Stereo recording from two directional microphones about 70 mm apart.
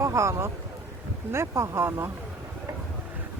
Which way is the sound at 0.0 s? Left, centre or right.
Right.